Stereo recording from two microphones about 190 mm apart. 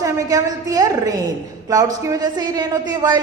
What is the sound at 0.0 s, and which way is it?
A woman's voice, 20° right (ahead or behind).